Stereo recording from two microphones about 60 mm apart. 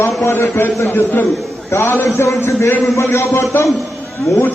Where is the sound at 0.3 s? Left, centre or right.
Left.